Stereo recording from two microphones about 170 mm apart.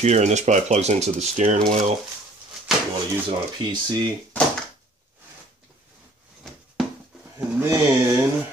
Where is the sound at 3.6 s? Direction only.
25° right (ahead or behind).